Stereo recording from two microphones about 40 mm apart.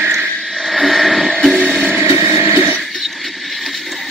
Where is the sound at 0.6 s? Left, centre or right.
Centre.